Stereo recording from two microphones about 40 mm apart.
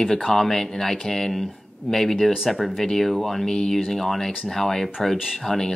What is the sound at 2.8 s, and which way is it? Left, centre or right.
Speech, centre.